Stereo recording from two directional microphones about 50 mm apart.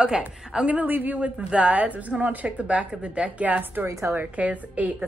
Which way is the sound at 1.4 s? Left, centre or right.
Right.